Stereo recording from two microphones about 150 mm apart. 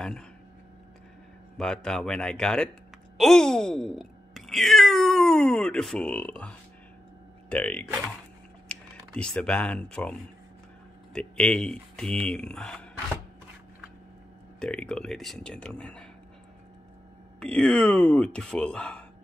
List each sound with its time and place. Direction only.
1.6 s speech: 5° left (ahead or behind)
11.1 s speech: 5° left (ahead or behind)
14.6 s speech: 5° left (ahead or behind)
17.4 s speech: 5° left (ahead or behind)